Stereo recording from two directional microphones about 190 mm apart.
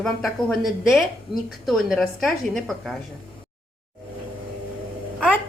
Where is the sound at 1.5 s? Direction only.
Centre (ahead or behind).